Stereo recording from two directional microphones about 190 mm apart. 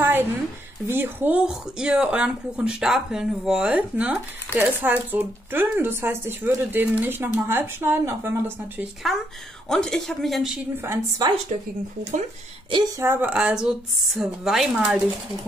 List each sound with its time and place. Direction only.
0.0 s a sound: 10° right (ahead or behind)
0.8 s speech: 10° right (ahead or behind)
9.0 s speech: centre (ahead or behind)
10.9 s a woman's voice: 20° right (ahead or behind)
13.0 s speech: 10° right (ahead or behind)